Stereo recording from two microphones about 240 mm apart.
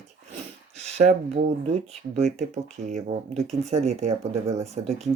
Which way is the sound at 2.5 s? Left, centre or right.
Right.